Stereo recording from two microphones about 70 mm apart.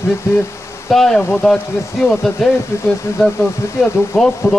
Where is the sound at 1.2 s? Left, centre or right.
Centre.